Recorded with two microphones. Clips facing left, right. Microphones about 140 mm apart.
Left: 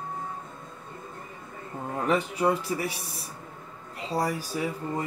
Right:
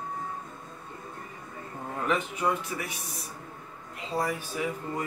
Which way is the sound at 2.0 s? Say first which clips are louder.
Left 3 dB; 35° left (ahead or behind).